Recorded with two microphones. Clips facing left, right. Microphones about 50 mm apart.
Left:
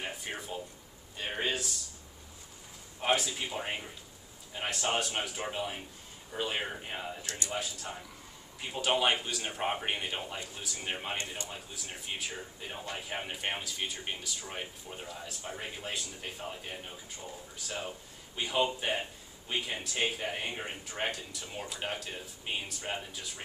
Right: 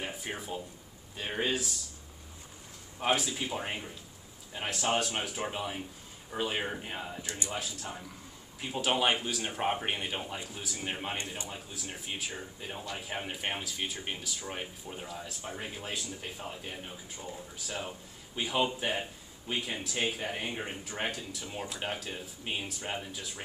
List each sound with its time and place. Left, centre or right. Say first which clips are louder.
0.0 s speech: right 1 dB; centre
3.0 s speech: even; centre
7.2 s speech: right 1 dB; centre
8.5 s speech: even; centre